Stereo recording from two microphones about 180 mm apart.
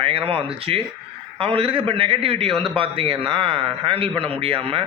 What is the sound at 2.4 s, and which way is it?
Speech, centre (ahead or behind).